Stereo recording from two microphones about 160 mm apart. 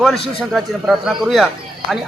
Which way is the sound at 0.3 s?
Centre (ahead or behind).